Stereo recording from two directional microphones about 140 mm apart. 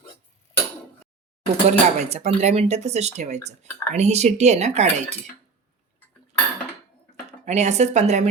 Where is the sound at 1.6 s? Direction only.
50° right (ahead or behind).